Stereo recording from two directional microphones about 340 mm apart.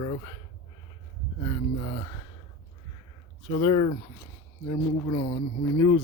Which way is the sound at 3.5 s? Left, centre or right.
Centre.